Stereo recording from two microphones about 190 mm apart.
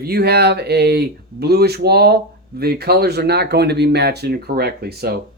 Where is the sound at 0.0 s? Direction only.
55° right (ahead or behind).